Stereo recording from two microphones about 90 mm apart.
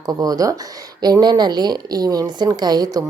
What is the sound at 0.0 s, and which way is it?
Speech, 45° right (ahead or behind).